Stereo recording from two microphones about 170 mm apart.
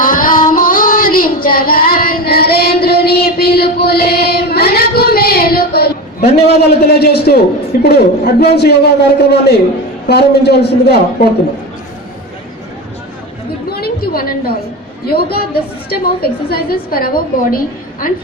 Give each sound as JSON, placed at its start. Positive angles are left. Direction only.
{"t": 0.0, "sound": "child singing", "side_deg": 55}
{"t": 7.8, "sound": "a man's voice", "side_deg": 70}
{"t": 13.7, "sound": "a sound", "side_deg": 65}
{"t": 15.1, "sound": "a woman's voice", "side_deg": 65}